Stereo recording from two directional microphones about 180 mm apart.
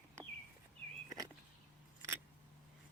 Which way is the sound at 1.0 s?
20° right (ahead or behind).